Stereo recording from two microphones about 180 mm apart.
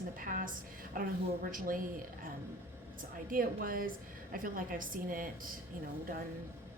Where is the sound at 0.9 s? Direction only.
50° right (ahead or behind).